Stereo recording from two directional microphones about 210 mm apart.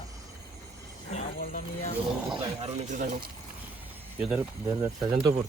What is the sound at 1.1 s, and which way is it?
Speech, 35° left (ahead or behind).